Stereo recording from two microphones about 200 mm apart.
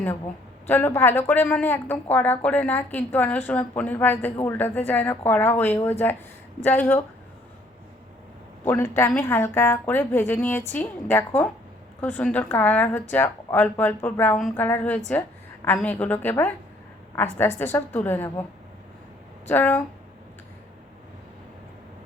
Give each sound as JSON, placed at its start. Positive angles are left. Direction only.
{"t": 0.7, "sound": "a woman's voice", "side_deg": 10}
{"t": 8.6, "sound": "a woman's voice", "side_deg": 10}
{"t": 17.6, "sound": "a woman's voice", "side_deg": 10}
{"t": 19.5, "sound": "a woman's voice", "side_deg": 10}